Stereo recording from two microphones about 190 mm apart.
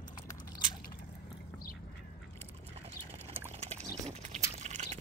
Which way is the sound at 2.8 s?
35° right (ahead or behind).